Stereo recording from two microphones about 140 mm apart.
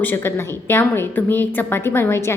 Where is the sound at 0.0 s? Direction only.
15° left (ahead or behind).